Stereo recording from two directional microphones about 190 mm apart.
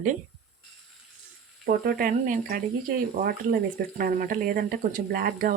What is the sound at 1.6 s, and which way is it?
Speech, 50° right (ahead or behind).